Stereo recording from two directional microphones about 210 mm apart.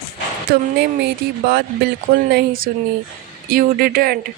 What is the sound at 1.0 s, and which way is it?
A man's voice, 50° right (ahead or behind).